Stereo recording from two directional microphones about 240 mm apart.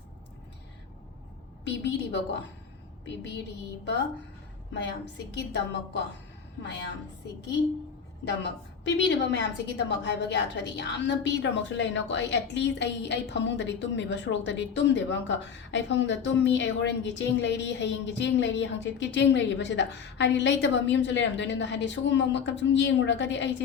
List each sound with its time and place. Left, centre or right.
1.6 s a woman's voice: left
8.8 s a woman's voice: left